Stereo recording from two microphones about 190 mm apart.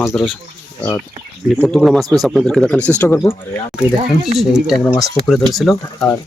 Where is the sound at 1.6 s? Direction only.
Centre (ahead or behind).